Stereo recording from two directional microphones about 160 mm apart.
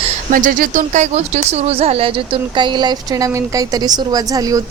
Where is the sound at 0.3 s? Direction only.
60° right (ahead or behind).